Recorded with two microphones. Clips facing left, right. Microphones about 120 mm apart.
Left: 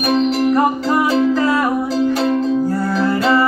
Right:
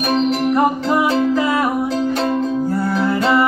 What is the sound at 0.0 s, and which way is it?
Music, centre (ahead or behind).